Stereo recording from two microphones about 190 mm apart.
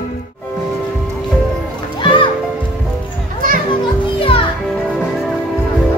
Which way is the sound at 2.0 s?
25° left (ahead or behind).